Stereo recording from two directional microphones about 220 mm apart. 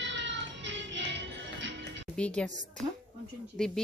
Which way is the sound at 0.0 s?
55° right (ahead or behind).